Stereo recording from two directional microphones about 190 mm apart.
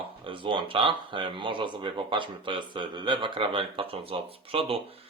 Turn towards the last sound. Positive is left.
turn(degrees=-30)  # may be behind; listen again after turning